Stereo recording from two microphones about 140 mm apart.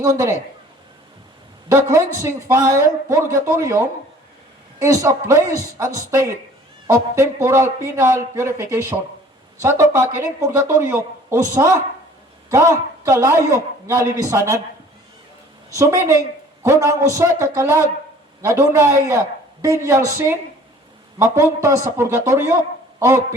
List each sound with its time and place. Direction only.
0.0 s a man's voice: 20° right (ahead or behind)
1.7 s a man's voice: 20° right (ahead or behind)
15.7 s a man's voice: 20° right (ahead or behind)